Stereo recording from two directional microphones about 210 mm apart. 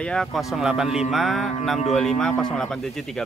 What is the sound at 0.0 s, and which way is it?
Speech, 5° left (ahead or behind).